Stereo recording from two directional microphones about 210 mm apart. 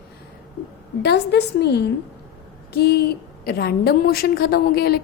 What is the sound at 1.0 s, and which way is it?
A woman's voice, 55° left (ahead or behind).